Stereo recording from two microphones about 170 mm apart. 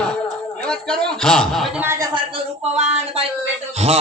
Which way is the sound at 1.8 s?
15° right (ahead or behind).